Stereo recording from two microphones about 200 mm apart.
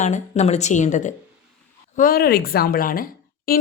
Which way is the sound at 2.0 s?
45° left (ahead or behind).